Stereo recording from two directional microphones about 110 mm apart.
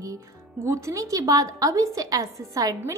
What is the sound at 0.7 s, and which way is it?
A woman's voice, 25° right (ahead or behind).